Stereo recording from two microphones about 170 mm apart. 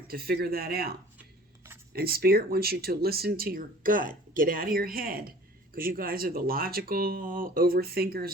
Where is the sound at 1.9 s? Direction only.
65° right (ahead or behind).